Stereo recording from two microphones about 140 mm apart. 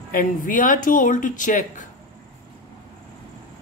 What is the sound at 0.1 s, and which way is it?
Speech, 80° left.